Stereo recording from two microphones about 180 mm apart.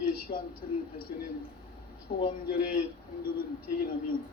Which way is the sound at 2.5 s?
55° left (ahead or behind).